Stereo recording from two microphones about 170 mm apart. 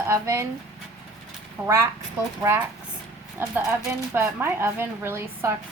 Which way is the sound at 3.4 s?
10° right (ahead or behind).